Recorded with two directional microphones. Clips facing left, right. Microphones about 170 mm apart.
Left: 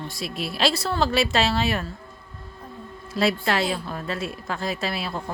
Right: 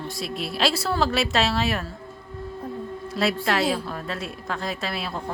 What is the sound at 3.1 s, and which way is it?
A woman's voice, centre (ahead or behind).